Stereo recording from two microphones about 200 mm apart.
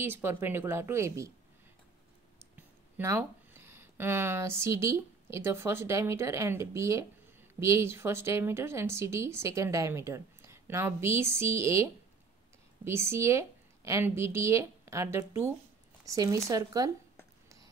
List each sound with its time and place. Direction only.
0.0 s speech: 10° right (ahead or behind)
2.5 s speech: 10° right (ahead or behind)